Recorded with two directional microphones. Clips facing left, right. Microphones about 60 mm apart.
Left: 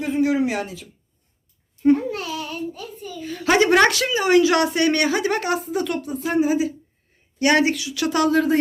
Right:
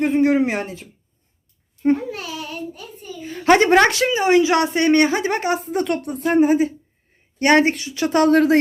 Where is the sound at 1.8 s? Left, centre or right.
Right.